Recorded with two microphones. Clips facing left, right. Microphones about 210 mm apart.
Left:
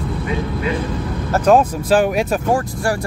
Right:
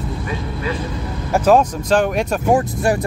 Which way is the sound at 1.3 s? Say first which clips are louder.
Even; 5° right (ahead or behind).